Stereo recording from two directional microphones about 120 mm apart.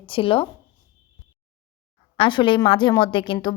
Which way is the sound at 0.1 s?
50° left (ahead or behind).